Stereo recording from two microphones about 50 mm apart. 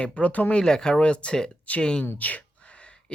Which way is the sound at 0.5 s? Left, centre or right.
Centre.